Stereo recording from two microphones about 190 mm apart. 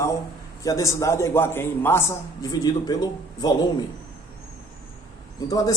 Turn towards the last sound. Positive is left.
turn(degrees=20)  # may be behind; listen again after turning